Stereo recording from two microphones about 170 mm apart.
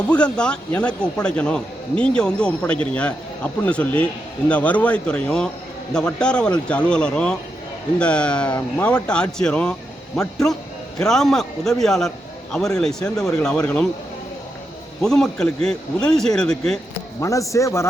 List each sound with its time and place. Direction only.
0.1 s a man's voice: 5° left (ahead or behind)
15.0 s a man's voice: 5° left (ahead or behind)
17.2 s speech: 20° left (ahead or behind)